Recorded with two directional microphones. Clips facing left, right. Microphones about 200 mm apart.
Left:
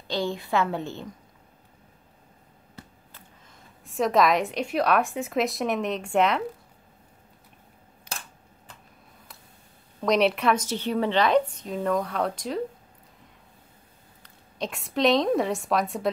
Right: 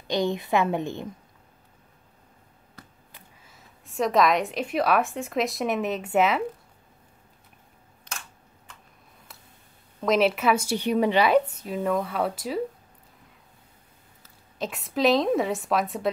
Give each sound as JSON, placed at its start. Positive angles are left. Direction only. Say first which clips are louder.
{"t": 0.1, "sound": "a woman's voice", "louder": "right 3 dB", "side_deg": -20}
{"t": 3.1, "sound": "a woman's voice", "louder": "left 1 dB", "side_deg": -10}
{"t": 8.1, "sound": "a sound", "louder": "left 2 dB", "side_deg": 10}
{"t": 8.7, "sound": "a sound", "louder": "left 1 dB", "side_deg": 35}
{"t": 9.9, "sound": "a woman's voice", "louder": "even", "side_deg": 0}
{"t": 14.2, "sound": "a woman's voice", "louder": "even", "side_deg": 0}